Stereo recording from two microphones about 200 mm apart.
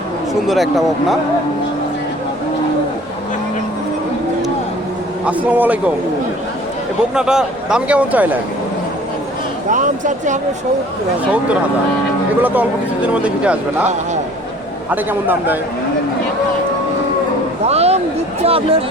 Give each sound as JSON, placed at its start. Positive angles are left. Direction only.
{"t": 0.4, "sound": "speech", "side_deg": 0}
{"t": 5.2, "sound": "speech", "side_deg": -10}
{"t": 7.1, "sound": "speech", "side_deg": -5}
{"t": 9.6, "sound": "speech", "side_deg": -40}
{"t": 12.4, "sound": "speech", "side_deg": -10}
{"t": 14.8, "sound": "speech", "side_deg": -10}
{"t": 17.7, "sound": "a sound", "side_deg": -30}
{"t": 18.4, "sound": "speech", "side_deg": -30}